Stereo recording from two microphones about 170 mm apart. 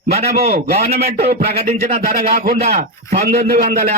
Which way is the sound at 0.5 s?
65° right (ahead or behind).